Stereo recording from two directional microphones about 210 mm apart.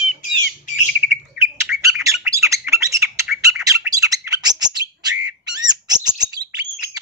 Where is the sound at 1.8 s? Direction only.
15° right (ahead or behind).